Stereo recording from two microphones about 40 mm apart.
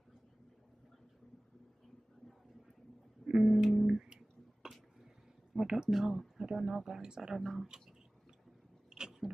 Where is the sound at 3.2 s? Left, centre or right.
Centre.